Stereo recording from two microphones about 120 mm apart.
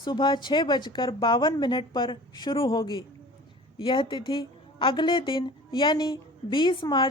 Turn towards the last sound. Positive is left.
turn(degrees=40)  # may be behind; listen again after turning